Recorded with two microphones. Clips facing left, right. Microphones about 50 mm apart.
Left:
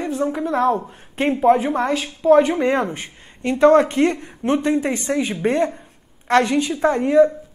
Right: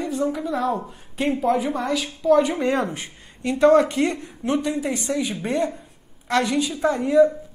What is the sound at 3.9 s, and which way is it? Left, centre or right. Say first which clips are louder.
Speech: left 4 dB; centre.